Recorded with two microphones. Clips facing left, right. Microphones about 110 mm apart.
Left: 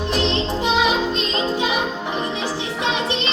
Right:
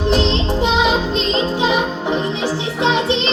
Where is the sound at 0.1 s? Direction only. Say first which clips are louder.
Right 4 dB; 20° right (ahead or behind).